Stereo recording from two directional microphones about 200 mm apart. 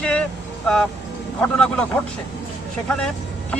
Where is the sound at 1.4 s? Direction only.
5° left (ahead or behind).